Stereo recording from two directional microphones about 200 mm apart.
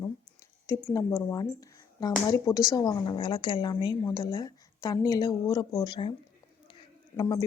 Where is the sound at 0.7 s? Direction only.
15° left (ahead or behind).